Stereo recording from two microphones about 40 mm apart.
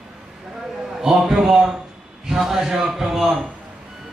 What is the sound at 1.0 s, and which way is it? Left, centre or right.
Speech, centre.